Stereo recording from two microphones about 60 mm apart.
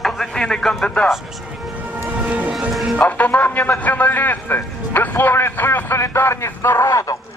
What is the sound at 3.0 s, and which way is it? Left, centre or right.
A man's voice, left.